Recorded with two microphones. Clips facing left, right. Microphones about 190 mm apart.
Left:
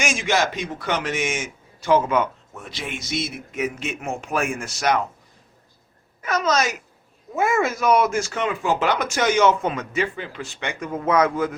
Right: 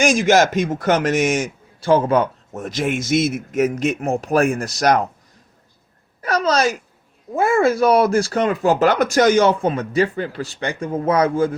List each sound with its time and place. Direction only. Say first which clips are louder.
0.0 s a man's voice: right 8 dB; 40° right (ahead or behind)
6.2 s a man's voice: right 4 dB; 35° right (ahead or behind)